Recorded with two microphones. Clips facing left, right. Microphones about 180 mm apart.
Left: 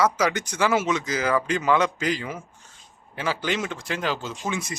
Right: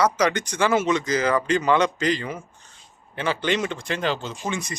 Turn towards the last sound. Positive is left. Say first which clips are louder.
# even
turn(degrees=5)  # may be behind; listen again after turning